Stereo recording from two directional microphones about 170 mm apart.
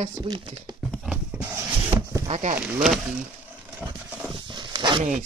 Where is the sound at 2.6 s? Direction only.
Centre (ahead or behind).